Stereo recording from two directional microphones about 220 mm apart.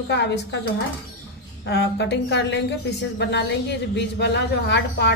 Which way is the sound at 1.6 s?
50° left (ahead or behind).